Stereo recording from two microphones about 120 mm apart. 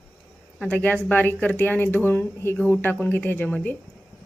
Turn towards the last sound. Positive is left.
turn(degrees=15)  # may be behind; listen again after turning